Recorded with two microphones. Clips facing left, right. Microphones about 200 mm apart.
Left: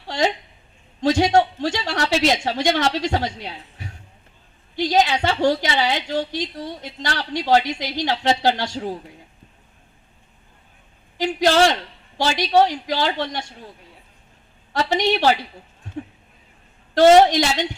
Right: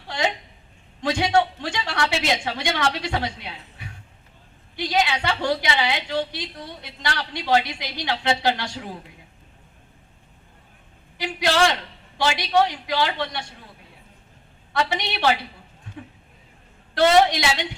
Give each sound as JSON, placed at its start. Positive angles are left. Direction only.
{"t": 1.0, "sound": "a woman's voice", "side_deg": 40}
{"t": 11.2, "sound": "a woman's voice", "side_deg": 45}
{"t": 14.7, "sound": "speech", "side_deg": 40}
{"t": 16.9, "sound": "a woman's voice", "side_deg": 45}